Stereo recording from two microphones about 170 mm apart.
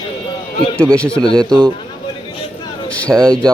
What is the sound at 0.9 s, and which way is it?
Speech, 5° left (ahead or behind).